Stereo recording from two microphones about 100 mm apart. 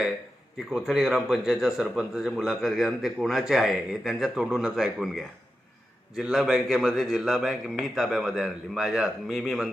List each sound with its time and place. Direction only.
0.7 s a man's voice: 5° right (ahead or behind)